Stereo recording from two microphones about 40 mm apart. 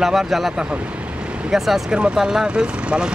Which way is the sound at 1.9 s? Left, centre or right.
Centre.